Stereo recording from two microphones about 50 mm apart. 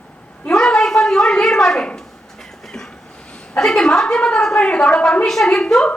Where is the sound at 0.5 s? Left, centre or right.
Centre.